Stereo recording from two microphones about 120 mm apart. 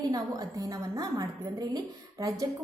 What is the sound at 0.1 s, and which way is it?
A woman's voice, 30° right (ahead or behind).